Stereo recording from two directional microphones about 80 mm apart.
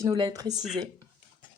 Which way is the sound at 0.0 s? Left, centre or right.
Right.